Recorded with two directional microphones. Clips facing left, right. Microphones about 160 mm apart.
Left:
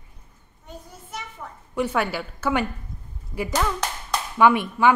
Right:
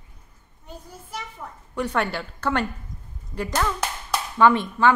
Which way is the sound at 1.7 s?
5° left (ahead or behind).